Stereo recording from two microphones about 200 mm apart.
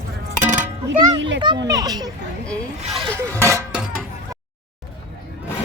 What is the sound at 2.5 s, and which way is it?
Speech, 5° left (ahead or behind).